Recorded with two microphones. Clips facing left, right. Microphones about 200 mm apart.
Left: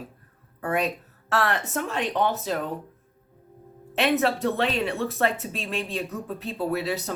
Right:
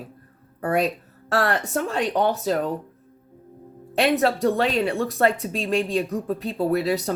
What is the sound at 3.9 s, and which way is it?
A woman's voice, 40° right (ahead or behind).